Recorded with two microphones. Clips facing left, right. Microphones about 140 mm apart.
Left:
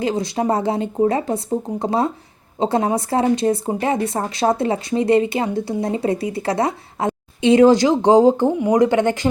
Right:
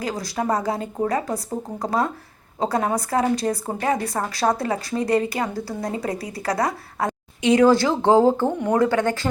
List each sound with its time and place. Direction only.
0.0 s speech: 25° left (ahead or behind)